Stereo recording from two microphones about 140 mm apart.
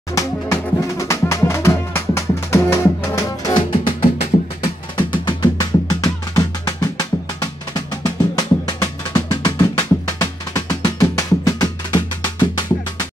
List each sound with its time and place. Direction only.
0.1 s music: 20° left (ahead or behind)
3.5 s music: 40° left (ahead or behind)